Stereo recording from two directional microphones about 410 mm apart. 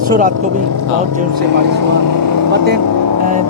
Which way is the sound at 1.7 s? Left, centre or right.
Right.